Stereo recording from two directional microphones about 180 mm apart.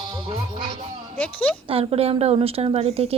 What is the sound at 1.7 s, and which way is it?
A woman's voice, 30° right (ahead or behind).